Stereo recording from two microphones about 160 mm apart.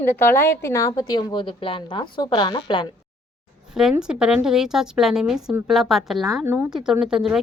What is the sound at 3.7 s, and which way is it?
A woman's voice, 5° right (ahead or behind).